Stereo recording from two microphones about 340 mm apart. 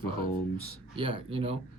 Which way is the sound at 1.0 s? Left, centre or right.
Centre.